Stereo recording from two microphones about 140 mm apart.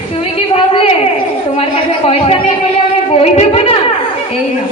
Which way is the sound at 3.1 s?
45° left (ahead or behind).